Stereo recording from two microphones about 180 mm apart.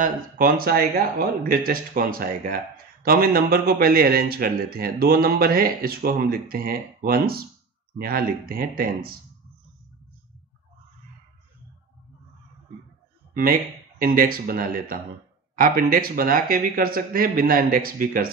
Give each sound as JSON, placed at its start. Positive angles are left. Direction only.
{"t": 0.0, "sound": "speech", "side_deg": -55}
{"t": 13.3, "sound": "speech", "side_deg": -50}